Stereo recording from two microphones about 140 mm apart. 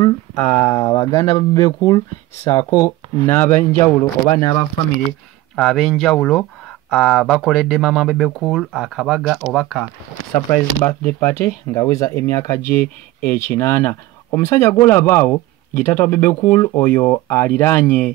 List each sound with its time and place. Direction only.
0.4 s speech: 20° left (ahead or behind)
5.6 s speech: centre (ahead or behind)
10.5 s speech: 15° left (ahead or behind)